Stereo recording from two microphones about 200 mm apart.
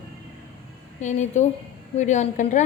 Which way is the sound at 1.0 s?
35° left (ahead or behind).